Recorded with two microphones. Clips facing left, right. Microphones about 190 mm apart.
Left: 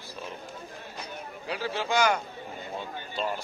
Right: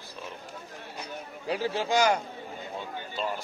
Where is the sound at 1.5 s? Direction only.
40° right (ahead or behind).